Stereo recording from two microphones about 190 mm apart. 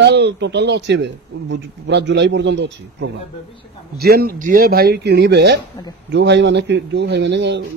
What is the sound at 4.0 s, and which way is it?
Speech, 50° right (ahead or behind).